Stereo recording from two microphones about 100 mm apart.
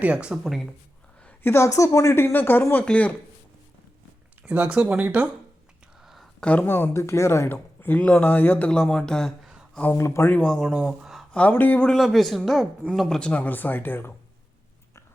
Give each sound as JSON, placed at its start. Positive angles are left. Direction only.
{"t": 0.0, "sound": "speech", "side_deg": -10}
{"t": 1.2, "sound": "a sound", "side_deg": 10}
{"t": 1.5, "sound": "speech", "side_deg": 30}
{"t": 4.4, "sound": "speech", "side_deg": -15}
{"t": 6.0, "sound": "a sound", "side_deg": -5}
{"t": 6.4, "sound": "speech", "side_deg": 15}
{"t": 9.9, "sound": "speech", "side_deg": 25}
{"t": 10.2, "sound": "speech", "side_deg": 10}
{"t": 10.6, "sound": "speech", "side_deg": -5}
{"t": 11.3, "sound": "speech", "side_deg": 15}
{"t": 11.9, "sound": "speech", "side_deg": 0}